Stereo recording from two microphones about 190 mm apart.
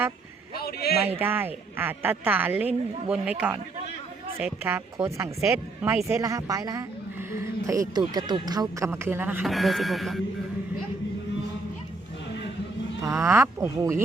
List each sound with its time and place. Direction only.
0.6 s a man's voice: 55° left (ahead or behind)
1.0 s a woman's voice: 10° right (ahead or behind)
13.0 s speech: 15° right (ahead or behind)